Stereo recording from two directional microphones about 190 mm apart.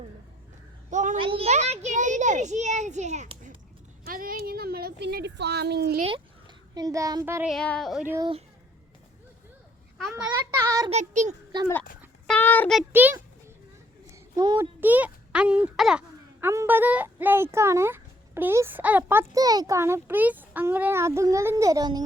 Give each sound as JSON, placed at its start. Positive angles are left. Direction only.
{"t": 0.9, "sound": "a sound", "side_deg": -40}
{"t": 1.2, "sound": "a child's voice", "side_deg": -30}
{"t": 4.0, "sound": "speech", "side_deg": -50}
{"t": 6.0, "sound": "a child's voice", "side_deg": -30}
{"t": 7.4, "sound": "speech", "side_deg": 5}
{"t": 8.0, "sound": "speech", "side_deg": -15}
{"t": 10.0, "sound": "speech", "side_deg": 0}
{"t": 10.3, "sound": "speech", "side_deg": -15}
{"t": 10.8, "sound": "a child's voice", "side_deg": -35}
{"t": 12.3, "sound": "child singing", "side_deg": 10}
{"t": 12.9, "sound": "speech", "side_deg": -10}
{"t": 14.3, "sound": "speech", "side_deg": -20}